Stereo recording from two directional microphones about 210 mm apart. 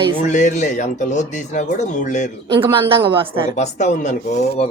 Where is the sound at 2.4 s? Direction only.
25° right (ahead or behind).